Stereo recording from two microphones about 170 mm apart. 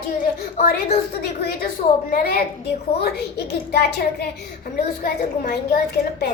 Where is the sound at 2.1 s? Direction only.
60° left (ahead or behind).